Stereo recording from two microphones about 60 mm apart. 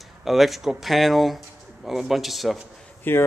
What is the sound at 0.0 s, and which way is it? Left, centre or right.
Speech, centre.